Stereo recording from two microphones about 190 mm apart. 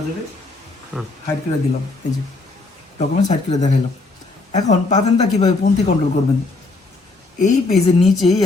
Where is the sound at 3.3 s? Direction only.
40° left (ahead or behind).